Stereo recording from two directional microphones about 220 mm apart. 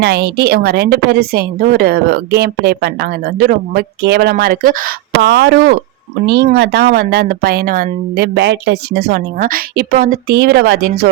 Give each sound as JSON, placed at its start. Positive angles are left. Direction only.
{"t": 0.0, "sound": "a woman's voice", "side_deg": -50}